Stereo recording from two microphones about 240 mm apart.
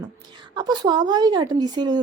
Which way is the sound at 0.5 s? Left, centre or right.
Centre.